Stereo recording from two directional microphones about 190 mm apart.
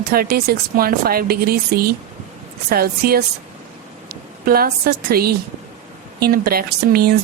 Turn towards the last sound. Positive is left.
turn(degrees=-55)  # may be behind; listen again after turning